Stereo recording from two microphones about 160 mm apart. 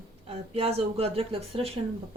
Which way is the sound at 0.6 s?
40° right (ahead or behind).